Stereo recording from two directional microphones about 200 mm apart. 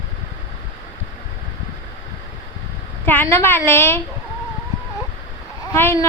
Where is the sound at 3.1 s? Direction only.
10° left (ahead or behind).